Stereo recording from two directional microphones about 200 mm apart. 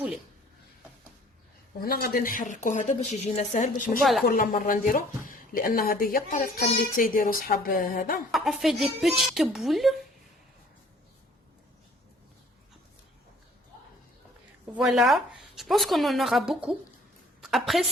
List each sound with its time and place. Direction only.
1.8 s a woman's voice: 50° left (ahead or behind)
8.3 s speech: centre (ahead or behind)
14.7 s a woman's voice: centre (ahead or behind)